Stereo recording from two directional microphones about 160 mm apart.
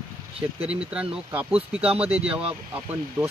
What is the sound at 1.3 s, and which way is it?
Speech, 10° right (ahead or behind).